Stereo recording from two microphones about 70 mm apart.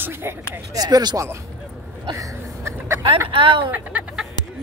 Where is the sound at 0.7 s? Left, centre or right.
Right.